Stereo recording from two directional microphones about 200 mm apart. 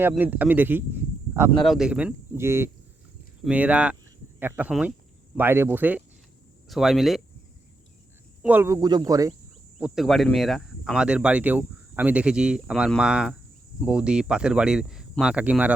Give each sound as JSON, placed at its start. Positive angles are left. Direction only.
{"t": 0.0, "sound": "speech", "side_deg": -10}
{"t": 8.4, "sound": "speech", "side_deg": -10}
{"t": 9.7, "sound": "speech", "side_deg": 0}